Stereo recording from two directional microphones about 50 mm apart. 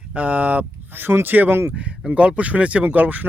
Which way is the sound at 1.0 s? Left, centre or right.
Right.